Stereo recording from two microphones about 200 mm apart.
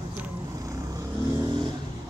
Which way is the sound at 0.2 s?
15° right (ahead or behind).